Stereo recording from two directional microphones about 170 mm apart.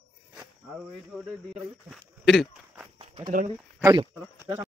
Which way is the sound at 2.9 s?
30° right (ahead or behind).